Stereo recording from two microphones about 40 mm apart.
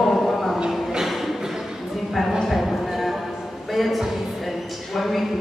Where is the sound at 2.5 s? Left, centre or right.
Centre.